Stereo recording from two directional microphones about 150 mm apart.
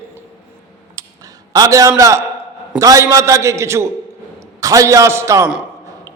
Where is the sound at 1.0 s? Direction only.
20° right (ahead or behind).